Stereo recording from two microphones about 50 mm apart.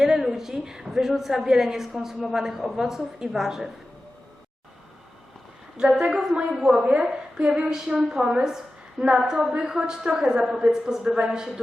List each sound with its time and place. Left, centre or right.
0.0 s a sound: centre
0.9 s a woman's voice: centre
5.8 s a woman's voice: centre